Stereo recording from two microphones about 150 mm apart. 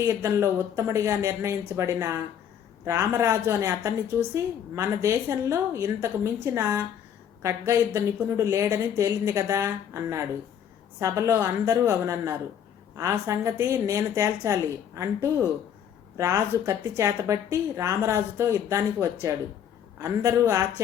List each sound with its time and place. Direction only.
0.0 s a woman's voice: 20° right (ahead or behind)